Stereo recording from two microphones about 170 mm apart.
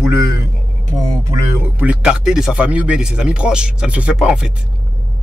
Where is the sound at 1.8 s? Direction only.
5° right (ahead or behind).